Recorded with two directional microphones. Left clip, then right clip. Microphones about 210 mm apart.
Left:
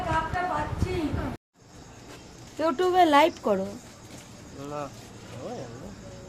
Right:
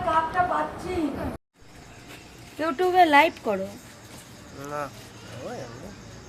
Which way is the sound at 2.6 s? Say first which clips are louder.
Right 2 dB; 50° left (ahead or behind).